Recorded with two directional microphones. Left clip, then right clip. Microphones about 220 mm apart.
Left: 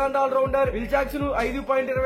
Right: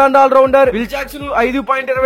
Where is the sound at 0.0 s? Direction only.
45° right (ahead or behind).